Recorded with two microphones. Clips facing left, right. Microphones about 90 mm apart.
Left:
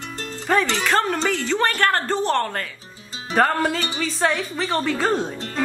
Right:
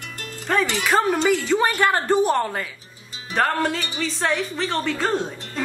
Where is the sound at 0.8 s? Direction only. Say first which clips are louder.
Right 2 dB; 5° right (ahead or behind).